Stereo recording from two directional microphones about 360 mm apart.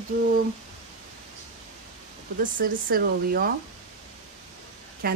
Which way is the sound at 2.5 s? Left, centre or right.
Right.